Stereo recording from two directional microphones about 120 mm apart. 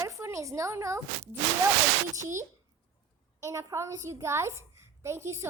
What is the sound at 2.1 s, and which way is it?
A child's voice, 25° right (ahead or behind).